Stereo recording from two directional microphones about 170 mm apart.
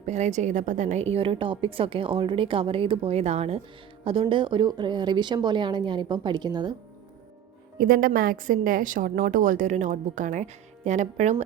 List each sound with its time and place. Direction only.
0.0 s a woman's voice: 40° right (ahead or behind); by 6.7 s 25° right (ahead or behind)
7.8 s a woman's voice: 55° right (ahead or behind)